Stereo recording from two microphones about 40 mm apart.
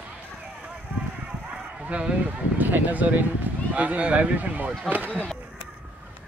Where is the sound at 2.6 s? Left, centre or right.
Right.